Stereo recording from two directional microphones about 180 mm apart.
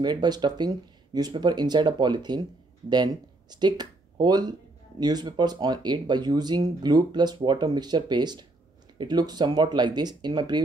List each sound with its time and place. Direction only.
0.0 s speech: 25° right (ahead or behind)